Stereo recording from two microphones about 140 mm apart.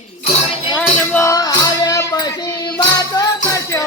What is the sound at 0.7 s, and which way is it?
Music, 15° left (ahead or behind).